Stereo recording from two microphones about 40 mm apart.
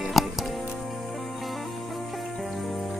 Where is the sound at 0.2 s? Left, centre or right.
Centre.